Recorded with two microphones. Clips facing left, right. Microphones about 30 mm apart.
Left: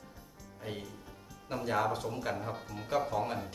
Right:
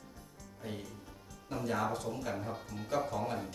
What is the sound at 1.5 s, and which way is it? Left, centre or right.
Speech, left.